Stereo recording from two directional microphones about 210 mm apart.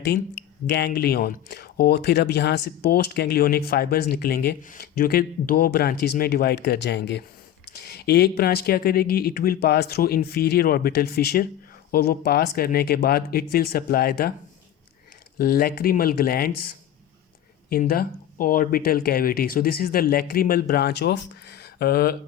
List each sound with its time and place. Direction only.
0.7 s speech: 50° left (ahead or behind)
15.4 s speech: 45° left (ahead or behind)
17.7 s speech: 45° left (ahead or behind)